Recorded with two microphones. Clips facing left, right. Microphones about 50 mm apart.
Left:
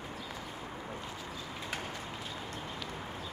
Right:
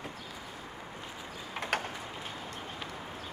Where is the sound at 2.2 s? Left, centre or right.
Right.